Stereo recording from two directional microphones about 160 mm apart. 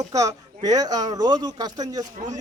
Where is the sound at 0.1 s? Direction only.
20° right (ahead or behind).